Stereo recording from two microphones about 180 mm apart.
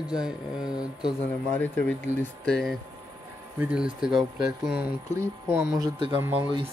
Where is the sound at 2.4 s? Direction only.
5° left (ahead or behind).